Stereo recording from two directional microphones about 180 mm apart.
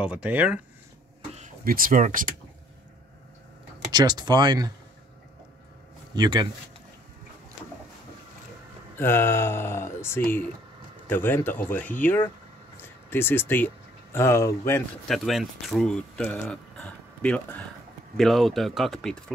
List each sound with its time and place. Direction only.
0.0 s speech: 5° right (ahead or behind)
1.6 s speech: 50° right (ahead or behind)
3.9 s speech: 25° right (ahead or behind)
6.1 s speech: 25° right (ahead or behind)
8.9 s speech: 10° left (ahead or behind)
15.0 s speech: centre (ahead or behind)